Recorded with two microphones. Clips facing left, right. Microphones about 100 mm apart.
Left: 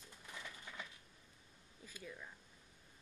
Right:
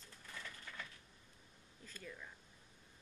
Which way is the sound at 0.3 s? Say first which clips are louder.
Even; 15° left (ahead or behind).